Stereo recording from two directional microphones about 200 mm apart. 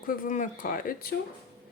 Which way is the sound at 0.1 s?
45° left (ahead or behind).